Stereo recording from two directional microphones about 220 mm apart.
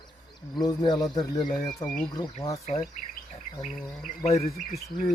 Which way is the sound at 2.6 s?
30° left (ahead or behind).